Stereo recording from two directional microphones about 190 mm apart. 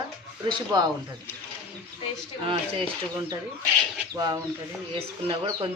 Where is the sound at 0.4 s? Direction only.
20° right (ahead or behind).